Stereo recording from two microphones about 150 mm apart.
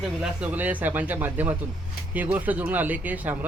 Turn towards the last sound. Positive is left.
turn(degrees=-10)  # may be behind; listen again after turning